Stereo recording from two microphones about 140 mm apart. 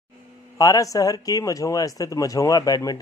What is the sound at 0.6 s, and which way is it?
Speech, 25° left (ahead or behind).